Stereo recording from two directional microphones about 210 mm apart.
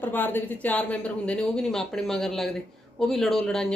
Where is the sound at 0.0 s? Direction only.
10° left (ahead or behind).